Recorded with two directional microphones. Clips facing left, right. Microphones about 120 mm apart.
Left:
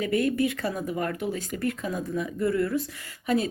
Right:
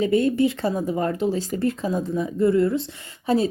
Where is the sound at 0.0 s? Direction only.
25° right (ahead or behind).